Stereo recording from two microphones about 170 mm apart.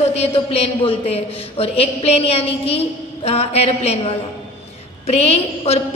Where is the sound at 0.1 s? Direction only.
35° left (ahead or behind).